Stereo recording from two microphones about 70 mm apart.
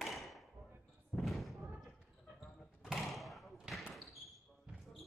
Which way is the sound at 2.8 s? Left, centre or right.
Centre.